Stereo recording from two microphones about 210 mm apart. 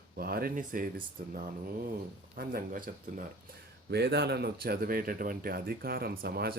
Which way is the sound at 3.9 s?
50° right (ahead or behind).